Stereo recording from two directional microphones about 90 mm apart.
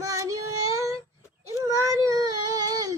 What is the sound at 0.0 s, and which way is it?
Child singing, 40° right (ahead or behind).